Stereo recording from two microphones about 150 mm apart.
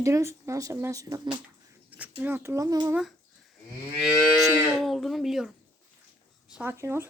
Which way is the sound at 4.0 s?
Centre (ahead or behind).